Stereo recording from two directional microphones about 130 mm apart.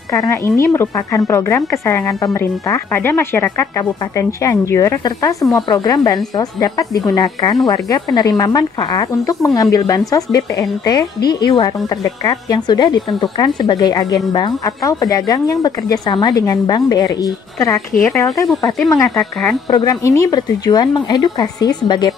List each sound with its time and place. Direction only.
0.1 s speech: 20° left (ahead or behind)